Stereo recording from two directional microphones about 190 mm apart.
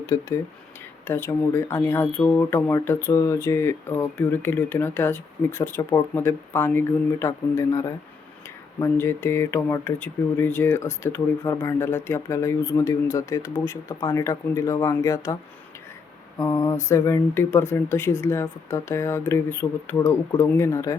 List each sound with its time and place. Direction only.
0.0 s speech: 15° left (ahead or behind)
16.4 s speech: 20° left (ahead or behind)